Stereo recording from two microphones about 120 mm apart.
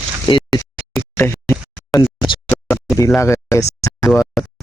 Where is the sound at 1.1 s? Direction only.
20° left (ahead or behind).